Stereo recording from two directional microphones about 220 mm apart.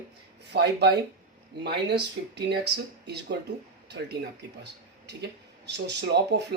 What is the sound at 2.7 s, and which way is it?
Speech, 50° right (ahead or behind).